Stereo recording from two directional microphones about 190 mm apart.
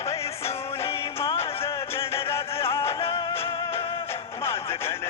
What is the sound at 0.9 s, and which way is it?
Music, 30° left (ahead or behind).